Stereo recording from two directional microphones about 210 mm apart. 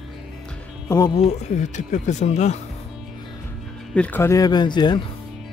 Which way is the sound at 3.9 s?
10° left (ahead or behind).